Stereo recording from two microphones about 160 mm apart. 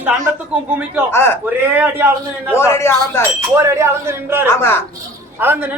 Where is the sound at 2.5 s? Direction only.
15° left (ahead or behind).